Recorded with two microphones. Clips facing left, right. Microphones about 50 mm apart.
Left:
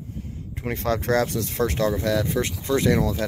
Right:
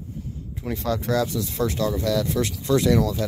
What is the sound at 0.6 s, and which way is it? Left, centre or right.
Speech, left.